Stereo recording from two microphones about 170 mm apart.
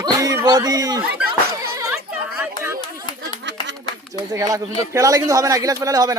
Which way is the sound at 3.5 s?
90° right.